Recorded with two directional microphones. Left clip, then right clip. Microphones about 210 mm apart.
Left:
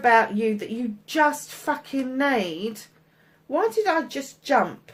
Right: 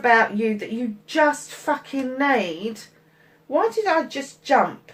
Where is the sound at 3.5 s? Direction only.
45° left (ahead or behind).